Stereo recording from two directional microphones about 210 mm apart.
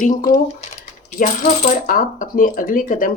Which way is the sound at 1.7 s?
40° left (ahead or behind).